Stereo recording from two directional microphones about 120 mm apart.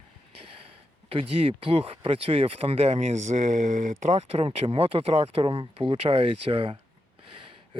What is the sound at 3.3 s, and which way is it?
Speech, 75° right (ahead or behind).